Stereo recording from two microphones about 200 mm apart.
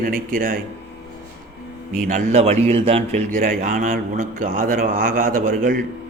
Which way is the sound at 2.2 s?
35° right (ahead or behind).